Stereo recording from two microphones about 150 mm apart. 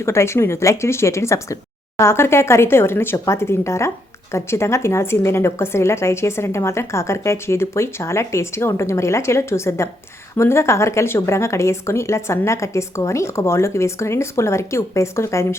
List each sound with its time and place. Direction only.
0.0 s a woman's voice: 20° left (ahead or behind)